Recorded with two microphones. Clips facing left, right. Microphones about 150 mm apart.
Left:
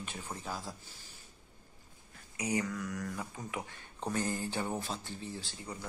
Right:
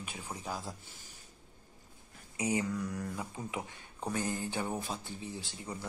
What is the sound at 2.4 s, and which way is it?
Speech, 10° right (ahead or behind).